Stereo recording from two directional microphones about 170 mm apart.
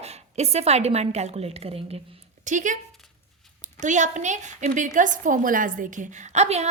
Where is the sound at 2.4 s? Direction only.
45° right (ahead or behind).